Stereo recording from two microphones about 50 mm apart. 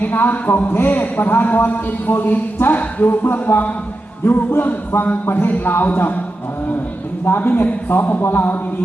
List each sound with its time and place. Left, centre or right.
0.0 s a man's voice: left
7.3 s a man's voice: left